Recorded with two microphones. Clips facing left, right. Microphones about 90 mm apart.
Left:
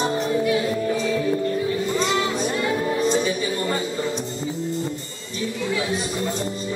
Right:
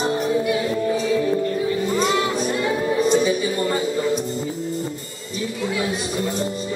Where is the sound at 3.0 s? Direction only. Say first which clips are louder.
Right 3 dB; 5° right (ahead or behind).